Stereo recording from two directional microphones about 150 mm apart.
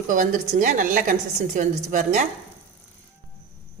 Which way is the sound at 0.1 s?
65° right (ahead or behind).